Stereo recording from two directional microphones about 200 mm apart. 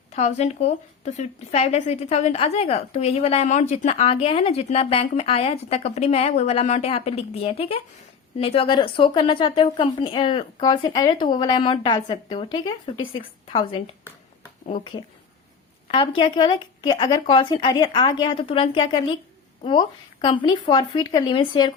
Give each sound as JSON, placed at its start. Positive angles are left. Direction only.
{"t": 0.1, "sound": "speech", "side_deg": 35}
{"t": 15.9, "sound": "speech", "side_deg": 25}